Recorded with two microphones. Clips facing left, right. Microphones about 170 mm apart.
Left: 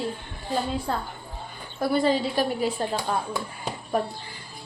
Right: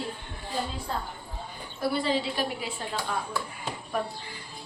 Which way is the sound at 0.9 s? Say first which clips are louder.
Left 4 dB; 65° left (ahead or behind).